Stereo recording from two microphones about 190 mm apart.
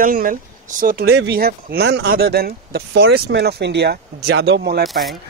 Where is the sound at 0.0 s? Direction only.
45° right (ahead or behind).